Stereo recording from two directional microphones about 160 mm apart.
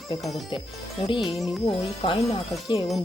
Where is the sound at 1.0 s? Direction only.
30° left (ahead or behind).